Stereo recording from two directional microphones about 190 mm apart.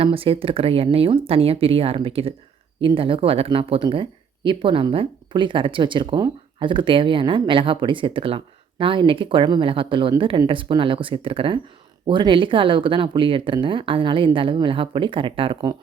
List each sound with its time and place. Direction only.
0.0 s speech: 30° right (ahead or behind)